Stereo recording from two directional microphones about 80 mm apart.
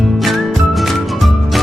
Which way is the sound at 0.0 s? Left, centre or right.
Centre.